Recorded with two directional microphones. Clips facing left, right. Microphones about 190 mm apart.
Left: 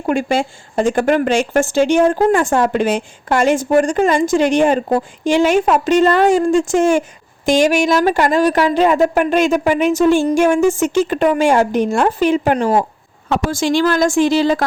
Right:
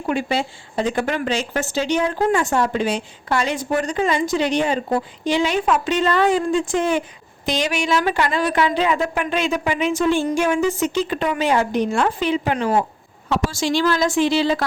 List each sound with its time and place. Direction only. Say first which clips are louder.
0.1 s a woman's voice: left 5 dB; 45° left (ahead or behind)
13.2 s a woman's voice: left 4 dB; 50° left (ahead or behind)